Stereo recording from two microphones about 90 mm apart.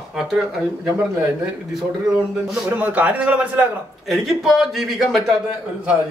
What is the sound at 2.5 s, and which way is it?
Speech, 15° right (ahead or behind).